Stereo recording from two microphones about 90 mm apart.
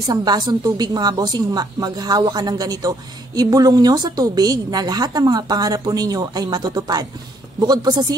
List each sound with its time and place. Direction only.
0.0 s a woman's voice: 50° right (ahead or behind)